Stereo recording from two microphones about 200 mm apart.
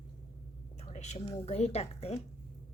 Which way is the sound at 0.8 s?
35° left (ahead or behind).